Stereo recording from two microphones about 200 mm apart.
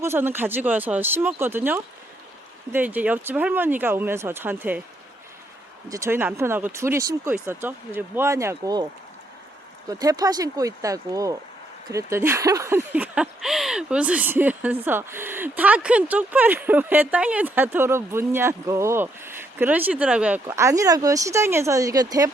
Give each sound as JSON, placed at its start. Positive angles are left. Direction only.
{"t": 0.0, "sound": "speech", "side_deg": -10}
{"t": 5.9, "sound": "speech", "side_deg": -15}
{"t": 10.0, "sound": "speech", "side_deg": -20}